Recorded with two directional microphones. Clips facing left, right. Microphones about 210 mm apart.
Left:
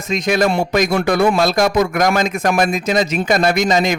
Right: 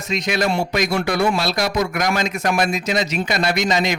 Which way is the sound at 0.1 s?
50° left (ahead or behind).